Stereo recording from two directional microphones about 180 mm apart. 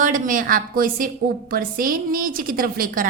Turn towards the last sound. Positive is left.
turn(degrees=-50)  # may be behind; listen again after turning